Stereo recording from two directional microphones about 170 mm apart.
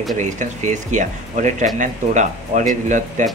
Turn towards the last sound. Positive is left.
turn(degrees=-45)  # may be behind; listen again after turning